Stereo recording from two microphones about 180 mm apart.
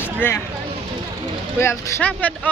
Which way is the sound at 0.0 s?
10° left (ahead or behind).